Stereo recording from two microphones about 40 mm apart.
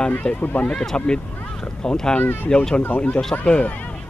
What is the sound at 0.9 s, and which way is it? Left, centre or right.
Speech, left.